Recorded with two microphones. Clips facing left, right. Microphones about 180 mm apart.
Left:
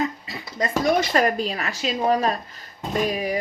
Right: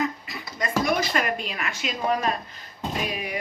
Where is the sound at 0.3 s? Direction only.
35° left (ahead or behind).